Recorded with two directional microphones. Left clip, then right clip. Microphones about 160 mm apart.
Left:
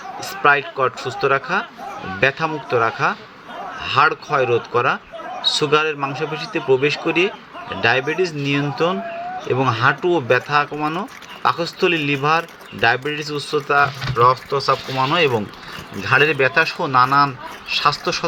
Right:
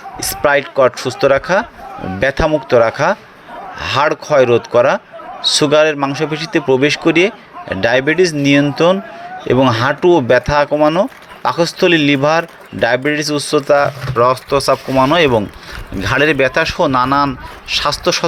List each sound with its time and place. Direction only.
0.2 s speech: 50° right (ahead or behind)